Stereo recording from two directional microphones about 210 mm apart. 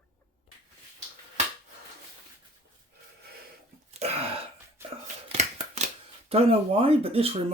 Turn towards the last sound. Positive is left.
turn(degrees=-30)  # may be behind; listen again after turning